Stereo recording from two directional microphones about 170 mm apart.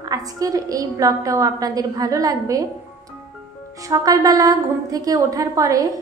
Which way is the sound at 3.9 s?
20° right (ahead or behind).